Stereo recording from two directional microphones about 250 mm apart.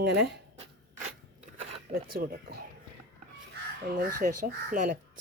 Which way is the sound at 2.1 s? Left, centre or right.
Right.